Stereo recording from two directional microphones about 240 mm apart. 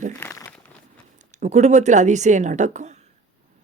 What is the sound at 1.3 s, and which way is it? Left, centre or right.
Speech, right.